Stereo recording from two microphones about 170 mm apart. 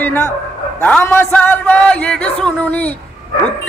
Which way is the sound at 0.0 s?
15° left (ahead or behind).